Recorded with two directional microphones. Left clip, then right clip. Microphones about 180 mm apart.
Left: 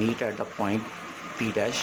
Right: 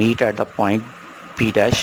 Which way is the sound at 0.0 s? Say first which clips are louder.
Right 10 dB; 50° right (ahead or behind).